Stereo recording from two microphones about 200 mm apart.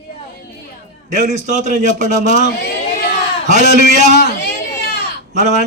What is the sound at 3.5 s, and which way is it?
Speech, 35° right (ahead or behind).